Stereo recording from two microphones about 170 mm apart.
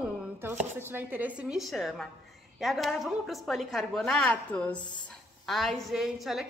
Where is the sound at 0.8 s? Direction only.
10° right (ahead or behind).